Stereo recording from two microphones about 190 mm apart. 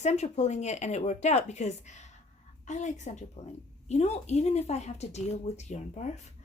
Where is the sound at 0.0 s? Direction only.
35° left (ahead or behind).